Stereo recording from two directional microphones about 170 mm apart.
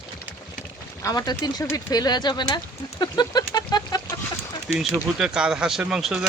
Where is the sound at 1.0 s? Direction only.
20° left (ahead or behind).